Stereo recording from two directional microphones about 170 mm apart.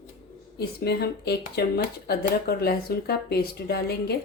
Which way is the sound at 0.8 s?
75° left (ahead or behind).